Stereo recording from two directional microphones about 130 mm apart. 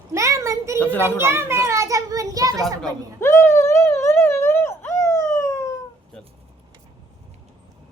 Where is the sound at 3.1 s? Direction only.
20° left (ahead or behind).